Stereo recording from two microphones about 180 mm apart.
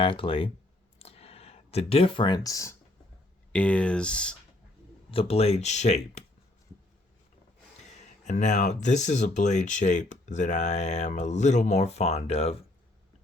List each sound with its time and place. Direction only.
0.0 s speech: 30° left (ahead or behind)
0.9 s a sound: 35° left (ahead or behind); by 2.7 s 20° left (ahead or behind)
3.5 s speech: 5° left (ahead or behind)
5.1 s speech: 35° left (ahead or behind)
8.2 s speech: 40° left (ahead or behind)